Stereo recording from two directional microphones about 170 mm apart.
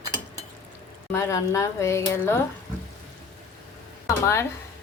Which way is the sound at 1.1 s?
15° left (ahead or behind).